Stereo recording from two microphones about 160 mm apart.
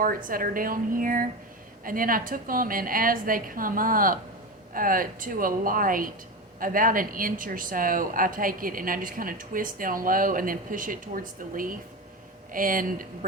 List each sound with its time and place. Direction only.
0.3 s a woman's voice: 60° right (ahead or behind)